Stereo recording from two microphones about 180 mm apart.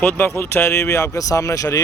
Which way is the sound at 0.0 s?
10° left (ahead or behind).